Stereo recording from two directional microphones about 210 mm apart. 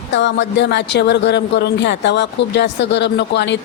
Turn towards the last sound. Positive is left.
turn(degrees=55)  # may be behind; listen again after turning